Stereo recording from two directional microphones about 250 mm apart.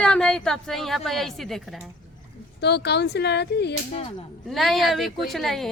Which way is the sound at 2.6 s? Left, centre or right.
Left.